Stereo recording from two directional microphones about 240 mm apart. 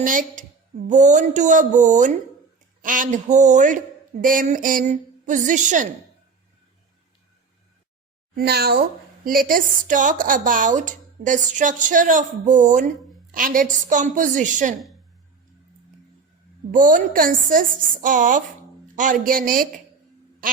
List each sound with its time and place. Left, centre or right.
0.0 s a woman's voice: right
8.4 s a woman's voice: right
16.7 s a woman's voice: right